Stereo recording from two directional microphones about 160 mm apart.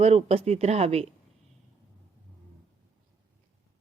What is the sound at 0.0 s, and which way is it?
Speech, 40° right (ahead or behind).